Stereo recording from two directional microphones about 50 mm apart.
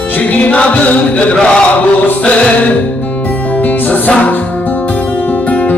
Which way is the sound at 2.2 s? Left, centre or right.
Left.